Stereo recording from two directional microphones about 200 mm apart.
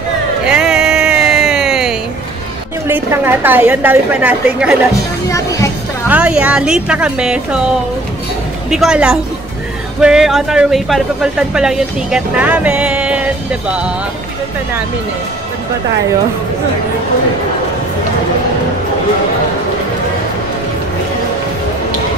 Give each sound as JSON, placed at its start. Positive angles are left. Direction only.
{"t": 0.5, "sound": "music", "side_deg": -5}
{"t": 2.9, "sound": "a woman's voice", "side_deg": -10}
{"t": 5.3, "sound": "speech", "side_deg": 15}
{"t": 6.0, "sound": "speech", "side_deg": -5}
{"t": 8.6, "sound": "speech", "side_deg": 0}